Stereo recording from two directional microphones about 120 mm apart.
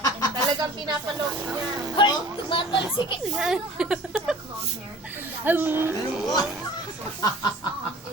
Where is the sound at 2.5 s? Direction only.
45° left (ahead or behind).